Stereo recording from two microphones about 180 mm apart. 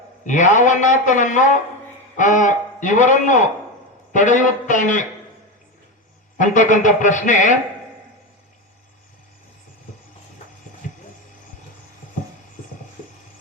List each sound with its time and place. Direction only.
0.3 s a man's voice: 45° left (ahead or behind)
6.4 s a man's voice: 45° left (ahead or behind)